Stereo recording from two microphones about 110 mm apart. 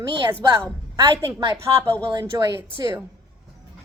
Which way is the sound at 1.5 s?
20° right (ahead or behind).